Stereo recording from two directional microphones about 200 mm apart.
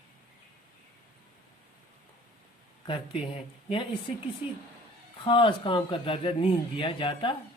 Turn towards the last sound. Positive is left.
turn(degrees=25)  # may be behind; listen again after turning